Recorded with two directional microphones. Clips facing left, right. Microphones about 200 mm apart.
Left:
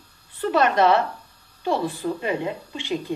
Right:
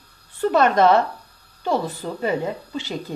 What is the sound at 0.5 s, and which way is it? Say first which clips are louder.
Speech: right 2 dB; 45° right (ahead or behind).